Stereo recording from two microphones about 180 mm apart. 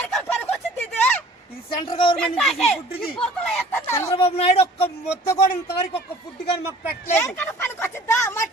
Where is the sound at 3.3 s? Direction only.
5° left (ahead or behind).